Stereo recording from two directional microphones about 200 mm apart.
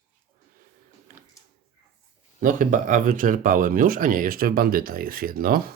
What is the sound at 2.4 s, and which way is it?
Speech, 40° right (ahead or behind).